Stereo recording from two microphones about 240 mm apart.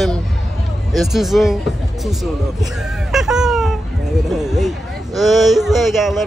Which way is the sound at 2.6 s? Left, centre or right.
Centre.